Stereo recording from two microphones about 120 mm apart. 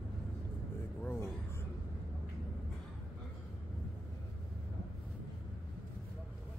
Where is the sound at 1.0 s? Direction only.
20° left (ahead or behind).